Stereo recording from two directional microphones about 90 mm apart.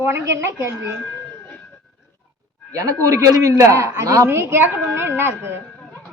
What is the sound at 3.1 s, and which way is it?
A woman's voice, 40° right (ahead or behind).